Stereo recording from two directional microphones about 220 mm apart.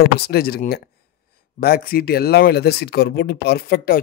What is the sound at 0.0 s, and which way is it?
Speech, 45° left (ahead or behind).